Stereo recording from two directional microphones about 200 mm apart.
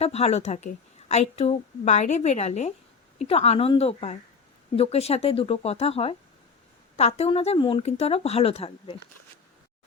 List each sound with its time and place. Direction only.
0.0 s a woman's voice: 30° left (ahead or behind)